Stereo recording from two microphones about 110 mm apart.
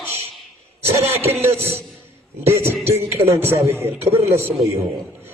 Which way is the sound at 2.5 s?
20° right (ahead or behind).